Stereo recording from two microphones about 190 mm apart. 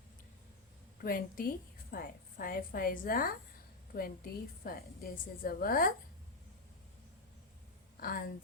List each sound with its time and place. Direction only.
1.0 s a woman's voice: 50° left (ahead or behind)
7.9 s speech: 50° left (ahead or behind)